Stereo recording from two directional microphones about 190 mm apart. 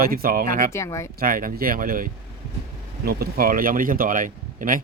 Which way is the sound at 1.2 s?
50° right (ahead or behind).